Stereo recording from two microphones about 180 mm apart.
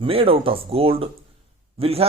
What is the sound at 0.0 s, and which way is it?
A man's voice, 30° right (ahead or behind).